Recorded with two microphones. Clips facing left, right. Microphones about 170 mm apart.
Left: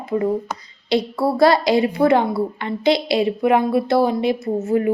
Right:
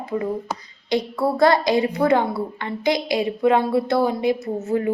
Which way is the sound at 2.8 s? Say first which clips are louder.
Left 4 dB; 15° right (ahead or behind).